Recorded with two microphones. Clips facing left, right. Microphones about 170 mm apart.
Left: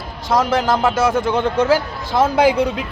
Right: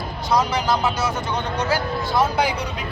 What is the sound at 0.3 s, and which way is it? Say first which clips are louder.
A man's voice: left 4 dB; 90° left.